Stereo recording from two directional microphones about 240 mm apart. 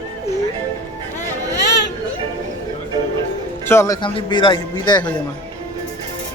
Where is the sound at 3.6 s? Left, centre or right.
Centre.